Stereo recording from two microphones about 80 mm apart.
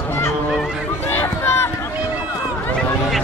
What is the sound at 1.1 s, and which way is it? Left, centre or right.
Run, left.